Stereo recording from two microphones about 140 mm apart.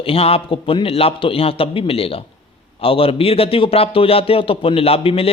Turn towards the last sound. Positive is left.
turn(degrees=40)  # may be behind; listen again after turning